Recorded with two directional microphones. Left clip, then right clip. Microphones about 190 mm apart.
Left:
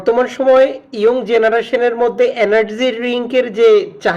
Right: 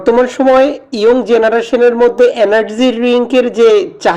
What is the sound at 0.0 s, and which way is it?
Speech, 35° right (ahead or behind).